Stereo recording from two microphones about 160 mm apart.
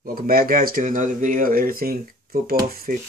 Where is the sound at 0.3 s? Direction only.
60° right (ahead or behind).